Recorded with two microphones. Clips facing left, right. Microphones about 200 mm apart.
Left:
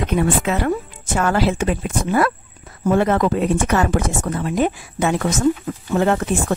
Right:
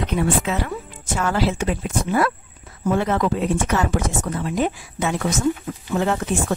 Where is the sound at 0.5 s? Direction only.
55° left (ahead or behind).